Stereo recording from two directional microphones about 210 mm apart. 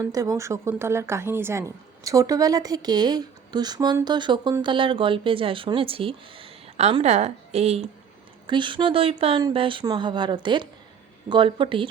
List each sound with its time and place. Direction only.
0.0 s a woman's voice: 15° right (ahead or behind)